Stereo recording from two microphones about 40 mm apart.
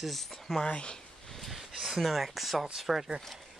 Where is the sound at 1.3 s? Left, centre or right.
Centre.